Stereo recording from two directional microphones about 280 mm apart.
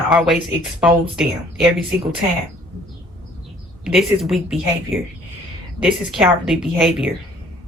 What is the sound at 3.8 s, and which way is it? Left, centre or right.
A woman's voice, centre.